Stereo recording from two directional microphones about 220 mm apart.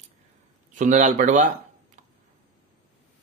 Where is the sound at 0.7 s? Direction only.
35° right (ahead or behind).